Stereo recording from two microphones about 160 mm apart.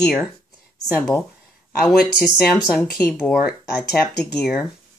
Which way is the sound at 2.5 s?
10° left (ahead or behind).